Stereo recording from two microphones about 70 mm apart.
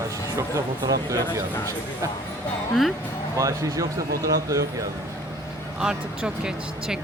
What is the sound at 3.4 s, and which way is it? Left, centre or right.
Speech, right.